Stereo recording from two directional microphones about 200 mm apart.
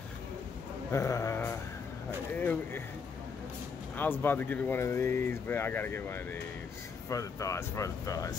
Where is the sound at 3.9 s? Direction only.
10° left (ahead or behind).